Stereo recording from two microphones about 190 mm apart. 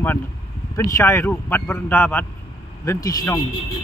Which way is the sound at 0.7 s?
15° left (ahead or behind).